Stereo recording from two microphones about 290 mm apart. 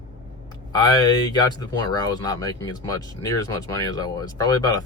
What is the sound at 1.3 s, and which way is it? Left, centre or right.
Speech, centre.